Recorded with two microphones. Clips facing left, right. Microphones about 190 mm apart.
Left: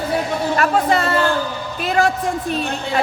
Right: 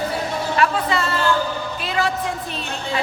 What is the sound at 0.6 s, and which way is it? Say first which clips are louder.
A woman's voice: left 3 dB; 45° left (ahead or behind).